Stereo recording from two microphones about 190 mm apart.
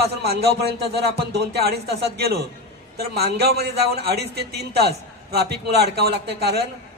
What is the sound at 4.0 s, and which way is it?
A man's voice, 60° right (ahead or behind).